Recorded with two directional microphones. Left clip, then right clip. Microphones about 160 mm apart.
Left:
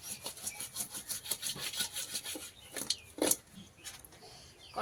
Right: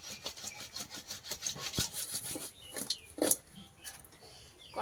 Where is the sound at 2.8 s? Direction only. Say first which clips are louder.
Even; 15° right (ahead or behind).